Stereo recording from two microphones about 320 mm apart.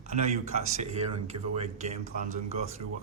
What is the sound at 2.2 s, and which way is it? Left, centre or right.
Speech, centre.